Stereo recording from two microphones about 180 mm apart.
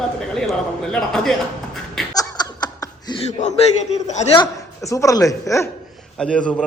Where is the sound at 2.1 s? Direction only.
20° left (ahead or behind).